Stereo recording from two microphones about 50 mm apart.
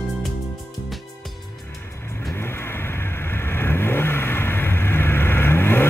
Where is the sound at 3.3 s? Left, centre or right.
Left.